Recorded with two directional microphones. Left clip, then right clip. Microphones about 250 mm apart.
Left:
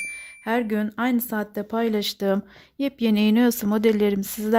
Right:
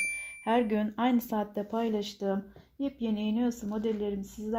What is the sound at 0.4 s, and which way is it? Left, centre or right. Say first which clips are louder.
Speech: left 3 dB; left.